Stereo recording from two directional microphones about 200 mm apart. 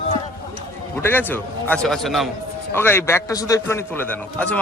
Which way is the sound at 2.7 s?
10° left (ahead or behind).